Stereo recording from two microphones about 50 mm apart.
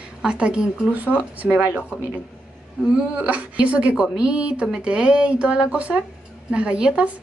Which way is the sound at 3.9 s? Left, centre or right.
Centre.